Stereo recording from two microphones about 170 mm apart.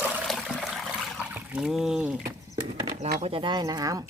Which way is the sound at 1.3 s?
5° right (ahead or behind).